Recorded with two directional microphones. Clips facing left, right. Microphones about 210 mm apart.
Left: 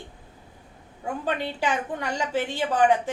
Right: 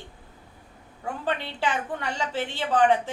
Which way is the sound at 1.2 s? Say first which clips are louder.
Left 1 dB; 15° left (ahead or behind).